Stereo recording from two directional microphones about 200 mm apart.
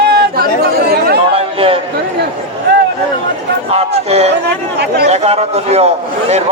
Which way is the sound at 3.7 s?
30° right (ahead or behind).